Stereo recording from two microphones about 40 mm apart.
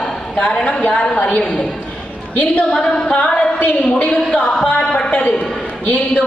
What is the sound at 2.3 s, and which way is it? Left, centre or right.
Speech, left.